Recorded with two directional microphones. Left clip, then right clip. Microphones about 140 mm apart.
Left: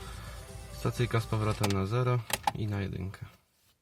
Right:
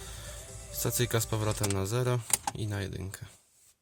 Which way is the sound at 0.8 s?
35° right (ahead or behind).